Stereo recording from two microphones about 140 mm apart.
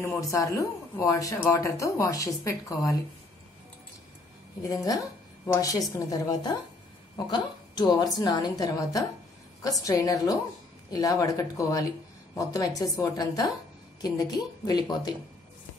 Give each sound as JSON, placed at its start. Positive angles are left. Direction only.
{"t": 0.0, "sound": "speech", "side_deg": 20}
{"t": 4.6, "sound": "a woman's voice", "side_deg": 25}